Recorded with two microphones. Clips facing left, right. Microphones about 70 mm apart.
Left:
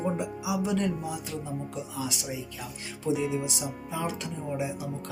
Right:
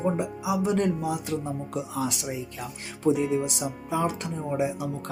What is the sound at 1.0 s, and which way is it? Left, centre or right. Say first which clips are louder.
Speech: right 6 dB; right.